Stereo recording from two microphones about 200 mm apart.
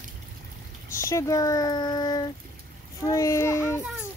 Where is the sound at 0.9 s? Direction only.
15° left (ahead or behind).